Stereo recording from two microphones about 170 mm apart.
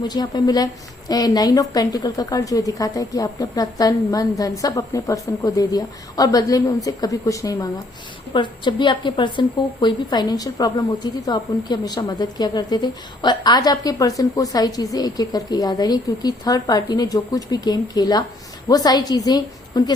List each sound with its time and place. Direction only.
0.1 s a woman's voice: 25° left (ahead or behind)